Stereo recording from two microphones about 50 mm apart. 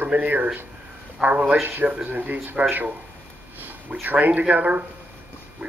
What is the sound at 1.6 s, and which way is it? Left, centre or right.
Speech, right.